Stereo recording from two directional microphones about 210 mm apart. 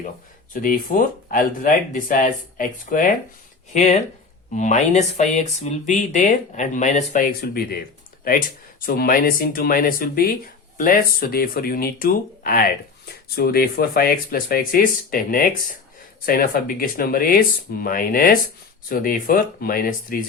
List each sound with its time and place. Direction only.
0.5 s speech: 40° left (ahead or behind)